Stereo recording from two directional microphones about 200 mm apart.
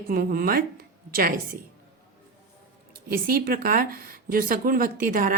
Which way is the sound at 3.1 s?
50° right (ahead or behind).